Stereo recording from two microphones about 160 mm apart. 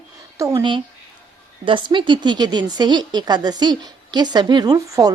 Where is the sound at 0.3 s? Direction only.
20° right (ahead or behind).